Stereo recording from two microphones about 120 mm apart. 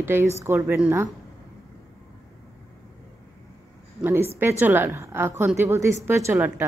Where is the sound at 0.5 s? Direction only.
15° right (ahead or behind).